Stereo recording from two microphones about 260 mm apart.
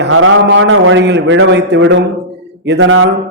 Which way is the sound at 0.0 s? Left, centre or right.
Right.